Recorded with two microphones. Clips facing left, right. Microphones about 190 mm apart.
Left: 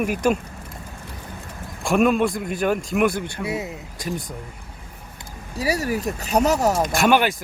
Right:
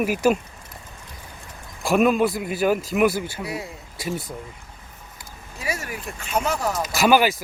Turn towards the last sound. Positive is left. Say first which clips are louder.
# even
turn(degrees=-5)  # may be behind; listen again after turning